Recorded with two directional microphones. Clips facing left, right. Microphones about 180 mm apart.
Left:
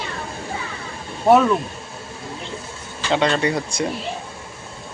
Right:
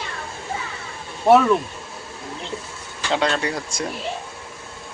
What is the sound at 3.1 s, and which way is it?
Speech, centre (ahead or behind).